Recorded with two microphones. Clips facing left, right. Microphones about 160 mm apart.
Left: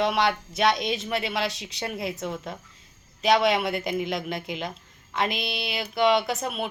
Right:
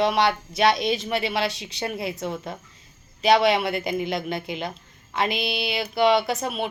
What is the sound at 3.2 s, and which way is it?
A woman's voice, centre (ahead or behind).